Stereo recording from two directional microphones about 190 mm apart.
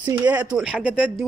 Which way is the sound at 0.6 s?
5° right (ahead or behind).